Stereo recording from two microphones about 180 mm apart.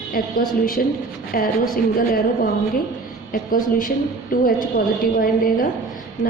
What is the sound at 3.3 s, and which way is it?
A woman's voice, 50° left (ahead or behind).